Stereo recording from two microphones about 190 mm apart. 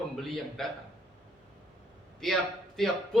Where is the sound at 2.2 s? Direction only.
Centre (ahead or behind).